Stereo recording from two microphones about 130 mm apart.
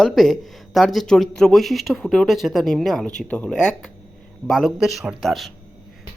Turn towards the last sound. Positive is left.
turn(degrees=0)  # may be behind; listen again after turning